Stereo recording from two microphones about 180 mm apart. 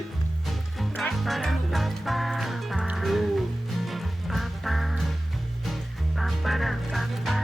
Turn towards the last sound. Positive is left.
turn(degrees=0)  # may be behind; listen again after turning